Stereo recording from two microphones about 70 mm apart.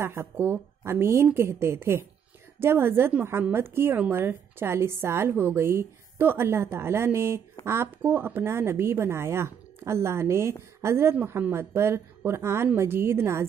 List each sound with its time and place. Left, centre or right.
0.0 s a woman's voice: right